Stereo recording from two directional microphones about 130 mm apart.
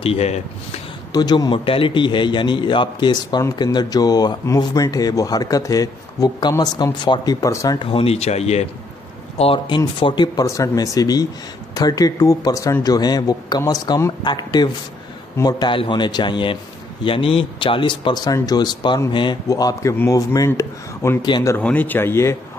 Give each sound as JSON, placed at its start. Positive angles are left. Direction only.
{"t": 0.0, "sound": "speech", "side_deg": 50}
{"t": 1.1, "sound": "a man's voice", "side_deg": 30}
{"t": 7.8, "sound": "speech", "side_deg": 45}
{"t": 9.4, "sound": "a man's voice", "side_deg": 45}
{"t": 21.5, "sound": "a man's voice", "side_deg": 15}